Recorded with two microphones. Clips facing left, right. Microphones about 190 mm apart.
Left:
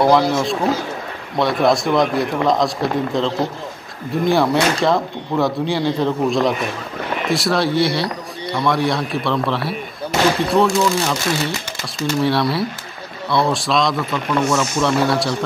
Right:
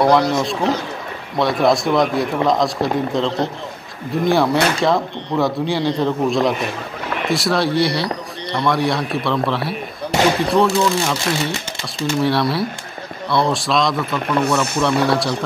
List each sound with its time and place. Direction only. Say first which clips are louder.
0.0 s speech: even; centre (ahead or behind)
14.4 s speech: left 1 dB; 60° right (ahead or behind)
14.8 s speech: even; centre (ahead or behind)